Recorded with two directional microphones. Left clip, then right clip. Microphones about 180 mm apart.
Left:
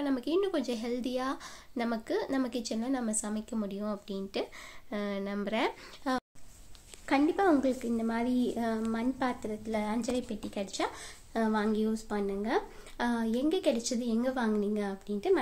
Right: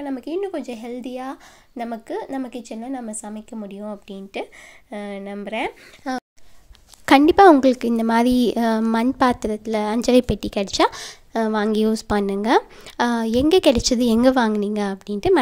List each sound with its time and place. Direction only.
0.0 s a woman's voice: 15° right (ahead or behind)
6.0 s speech: 30° right (ahead or behind)
7.1 s a woman's voice: 65° right (ahead or behind)